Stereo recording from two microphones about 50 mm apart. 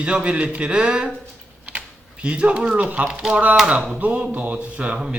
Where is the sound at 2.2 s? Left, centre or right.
Right.